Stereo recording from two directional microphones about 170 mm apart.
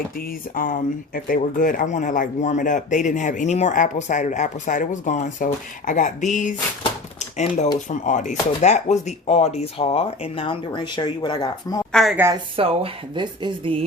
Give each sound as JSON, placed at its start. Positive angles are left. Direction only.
{"t": 0.5, "sound": "speech", "side_deg": 55}
{"t": 7.2, "sound": "typewriter", "side_deg": 45}
{"t": 7.9, "sound": "speech", "side_deg": 45}
{"t": 11.9, "sound": "speech", "side_deg": 5}
{"t": 12.3, "sound": "speech", "side_deg": -30}